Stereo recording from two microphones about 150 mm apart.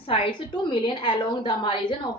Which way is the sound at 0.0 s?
35° left (ahead or behind).